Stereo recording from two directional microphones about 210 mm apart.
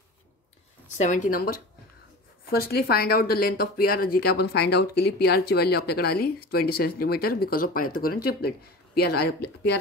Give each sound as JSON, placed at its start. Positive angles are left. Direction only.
{"t": 0.8, "sound": "a woman's voice", "side_deg": 35}